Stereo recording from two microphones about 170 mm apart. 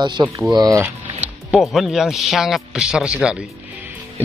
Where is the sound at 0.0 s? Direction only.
25° right (ahead or behind).